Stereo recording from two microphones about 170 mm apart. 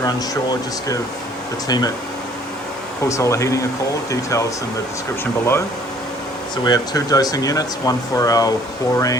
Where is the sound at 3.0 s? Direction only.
20° left (ahead or behind).